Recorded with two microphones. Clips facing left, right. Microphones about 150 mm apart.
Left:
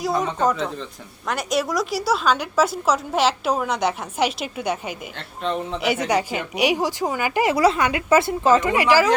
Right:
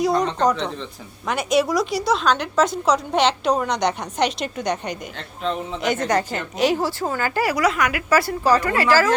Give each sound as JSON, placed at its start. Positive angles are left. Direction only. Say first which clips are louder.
{"t": 0.0, "sound": "a woman's voice", "louder": "right 2 dB", "side_deg": 0}
{"t": 7.5, "sound": "a woman's voice", "louder": "left 2 dB", "side_deg": 30}